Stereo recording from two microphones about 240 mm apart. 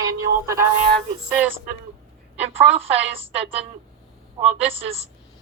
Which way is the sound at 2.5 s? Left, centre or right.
Right.